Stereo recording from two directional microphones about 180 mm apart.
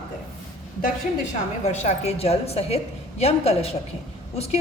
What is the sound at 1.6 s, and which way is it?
Speech, 40° left (ahead or behind).